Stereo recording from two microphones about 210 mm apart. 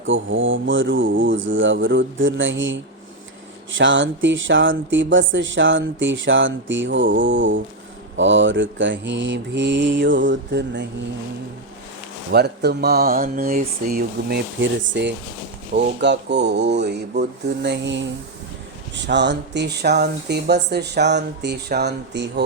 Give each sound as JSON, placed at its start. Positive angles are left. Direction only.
{"t": 0.0, "sound": "speech", "side_deg": -65}
{"t": 12.3, "sound": "speech", "side_deg": -50}